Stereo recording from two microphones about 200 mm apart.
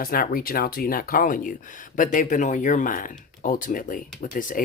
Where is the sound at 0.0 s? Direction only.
45° left (ahead or behind).